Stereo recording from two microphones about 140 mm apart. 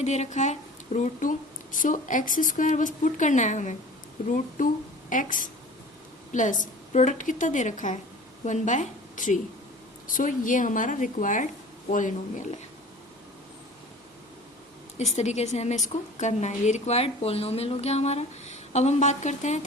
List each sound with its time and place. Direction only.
0.0 s a woman's voice: 55° left (ahead or behind)
14.9 s a woman's voice: 55° left (ahead or behind)